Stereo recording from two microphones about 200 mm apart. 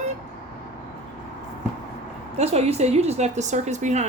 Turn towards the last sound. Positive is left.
turn(degrees=-35)  # may be behind; listen again after turning